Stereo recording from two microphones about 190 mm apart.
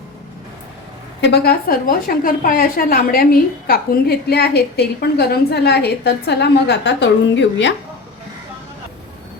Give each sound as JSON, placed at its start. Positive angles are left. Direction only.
{"t": 1.2, "sound": "a woman's voice", "side_deg": 60}